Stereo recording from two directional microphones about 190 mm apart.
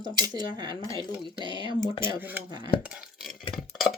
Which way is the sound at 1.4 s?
25° right (ahead or behind).